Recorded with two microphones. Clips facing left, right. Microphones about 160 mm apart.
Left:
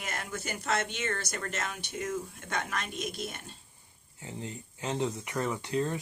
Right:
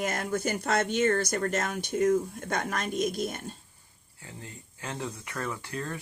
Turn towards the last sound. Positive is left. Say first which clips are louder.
# left 5 dB
turn(degrees=20)  # may be behind; listen again after turning